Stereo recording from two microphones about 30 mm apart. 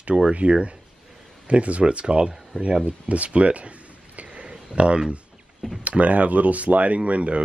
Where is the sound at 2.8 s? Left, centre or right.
Right.